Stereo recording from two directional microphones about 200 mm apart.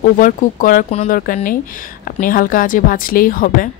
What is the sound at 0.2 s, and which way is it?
A woman's voice, 45° left (ahead or behind).